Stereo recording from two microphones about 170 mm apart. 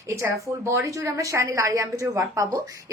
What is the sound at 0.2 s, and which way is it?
A woman's voice, 15° right (ahead or behind).